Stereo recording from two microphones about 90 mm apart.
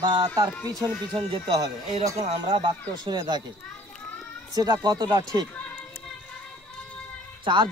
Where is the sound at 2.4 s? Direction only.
55° right (ahead or behind).